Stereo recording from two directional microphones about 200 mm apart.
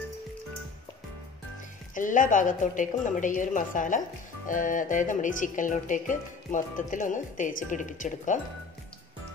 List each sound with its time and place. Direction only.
2.0 s speech: 40° left (ahead or behind)